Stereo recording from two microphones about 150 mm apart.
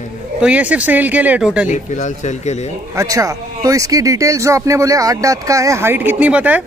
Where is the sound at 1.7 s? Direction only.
55° left (ahead or behind).